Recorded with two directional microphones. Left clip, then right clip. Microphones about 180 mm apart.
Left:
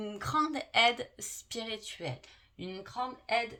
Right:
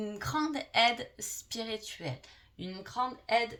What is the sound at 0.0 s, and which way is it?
Speech, 30° left (ahead or behind).